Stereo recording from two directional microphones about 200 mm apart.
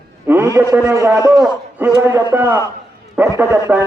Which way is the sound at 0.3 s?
15° right (ahead or behind).